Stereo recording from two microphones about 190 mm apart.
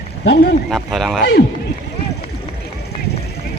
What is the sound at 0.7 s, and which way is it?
Speech, centre (ahead or behind).